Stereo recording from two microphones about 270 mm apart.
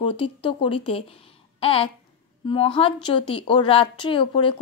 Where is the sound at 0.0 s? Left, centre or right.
Centre.